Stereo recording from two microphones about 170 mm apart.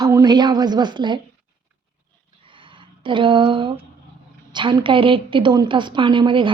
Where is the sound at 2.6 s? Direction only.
30° right (ahead or behind).